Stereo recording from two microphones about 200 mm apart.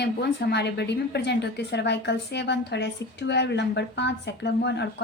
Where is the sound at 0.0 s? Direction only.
55° left (ahead or behind).